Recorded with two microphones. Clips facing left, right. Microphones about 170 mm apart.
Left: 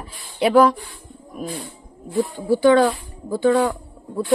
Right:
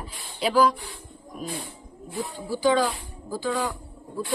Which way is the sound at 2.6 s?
60° left (ahead or behind).